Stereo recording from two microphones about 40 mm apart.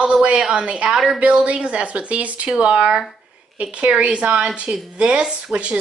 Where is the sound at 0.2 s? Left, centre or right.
Right.